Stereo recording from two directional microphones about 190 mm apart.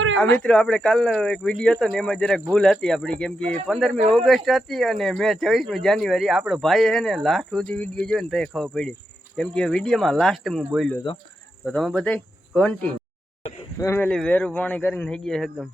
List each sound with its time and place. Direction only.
0.3 s speech: 5° left (ahead or behind)
11.1 s speech: 25° left (ahead or behind)
11.6 s a man's voice: centre (ahead or behind)